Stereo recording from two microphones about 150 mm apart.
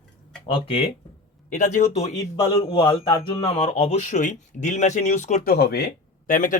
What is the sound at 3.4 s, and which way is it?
Speech, 40° left (ahead or behind).